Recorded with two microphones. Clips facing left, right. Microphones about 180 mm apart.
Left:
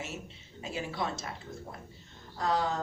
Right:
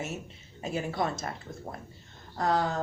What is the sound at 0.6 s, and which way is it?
Speech, 50° right (ahead or behind).